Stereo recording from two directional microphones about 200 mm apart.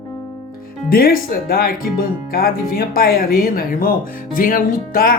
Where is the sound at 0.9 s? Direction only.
45° left (ahead or behind).